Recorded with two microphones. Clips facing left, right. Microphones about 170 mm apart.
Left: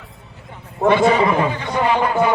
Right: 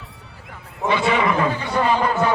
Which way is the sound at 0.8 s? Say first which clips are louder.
Left 6 dB; 50° left (ahead or behind).